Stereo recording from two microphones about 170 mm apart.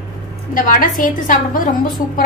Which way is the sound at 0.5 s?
50° left (ahead or behind).